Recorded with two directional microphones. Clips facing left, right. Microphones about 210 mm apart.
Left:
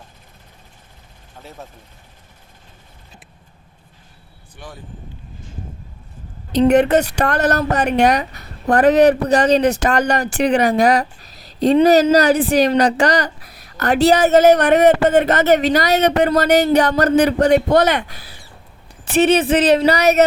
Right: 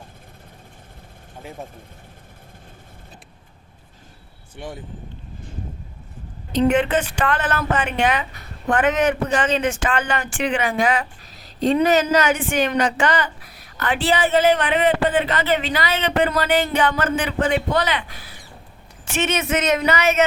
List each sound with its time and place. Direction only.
1.4 s speech: 15° right (ahead or behind)
4.5 s speech: 25° right (ahead or behind)
6.5 s a woman's voice: 40° left (ahead or behind)